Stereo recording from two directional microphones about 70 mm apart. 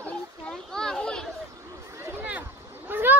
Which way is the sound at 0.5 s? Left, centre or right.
Centre.